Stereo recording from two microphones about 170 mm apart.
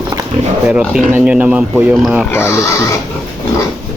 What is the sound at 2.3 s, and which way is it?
Speech, 15° left (ahead or behind).